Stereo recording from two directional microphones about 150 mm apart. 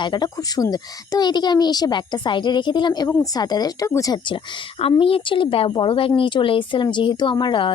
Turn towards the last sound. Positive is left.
turn(degrees=35)  # may be behind; listen again after turning